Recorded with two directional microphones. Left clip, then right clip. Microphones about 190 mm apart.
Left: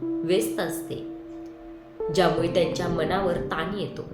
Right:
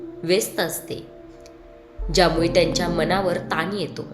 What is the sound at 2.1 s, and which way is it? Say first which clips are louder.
A woman's voice: right 5 dB; 25° right (ahead or behind).